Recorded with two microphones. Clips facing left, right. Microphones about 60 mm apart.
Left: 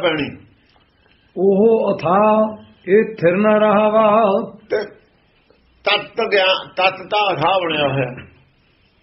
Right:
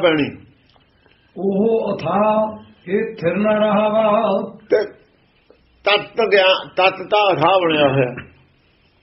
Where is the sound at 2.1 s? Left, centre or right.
Left.